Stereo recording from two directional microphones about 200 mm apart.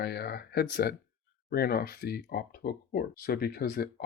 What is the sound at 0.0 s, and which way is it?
Speech, 55° left (ahead or behind).